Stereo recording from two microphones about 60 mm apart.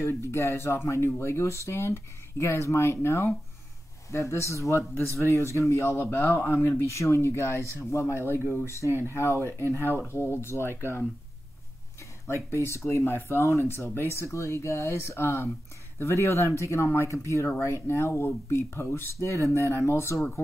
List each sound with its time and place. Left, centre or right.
0.0 s speech: left
5.9 s a man's voice: left
6.8 s speech: left
12.4 s speech: left